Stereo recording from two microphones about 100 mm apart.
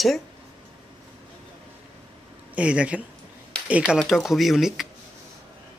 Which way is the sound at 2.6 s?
10° right (ahead or behind).